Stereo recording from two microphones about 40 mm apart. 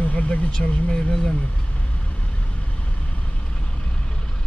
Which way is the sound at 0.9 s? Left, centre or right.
Left.